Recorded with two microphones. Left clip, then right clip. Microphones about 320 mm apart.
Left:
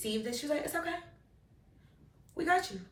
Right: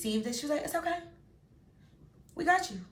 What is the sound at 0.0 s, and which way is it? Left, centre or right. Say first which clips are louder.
Speech: right 1 dB; centre.